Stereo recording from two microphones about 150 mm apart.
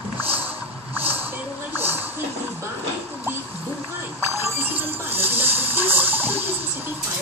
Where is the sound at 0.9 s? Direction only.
10° right (ahead or behind).